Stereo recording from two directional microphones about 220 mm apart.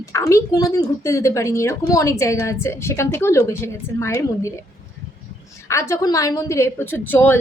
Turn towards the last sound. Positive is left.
turn(degrees=10)  # may be behind; listen again after turning